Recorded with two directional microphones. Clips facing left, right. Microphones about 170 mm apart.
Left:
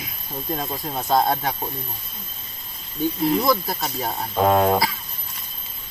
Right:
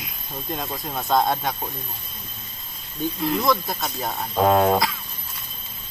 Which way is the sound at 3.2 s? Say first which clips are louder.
Left 2 dB; 5° left (ahead or behind).